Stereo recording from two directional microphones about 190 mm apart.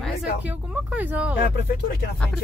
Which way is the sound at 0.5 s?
10° right (ahead or behind).